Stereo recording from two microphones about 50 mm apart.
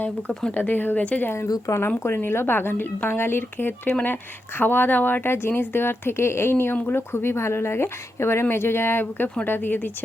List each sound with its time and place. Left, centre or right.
0.5 s a woman's voice: left
1.3 s a woman's voice: left